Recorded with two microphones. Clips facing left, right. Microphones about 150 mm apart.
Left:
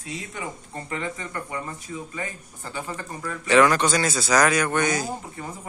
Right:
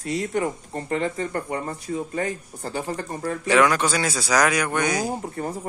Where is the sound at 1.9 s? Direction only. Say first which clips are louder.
Right 7 dB; 50° right (ahead or behind).